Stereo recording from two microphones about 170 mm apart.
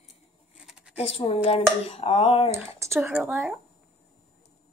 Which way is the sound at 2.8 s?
10° right (ahead or behind).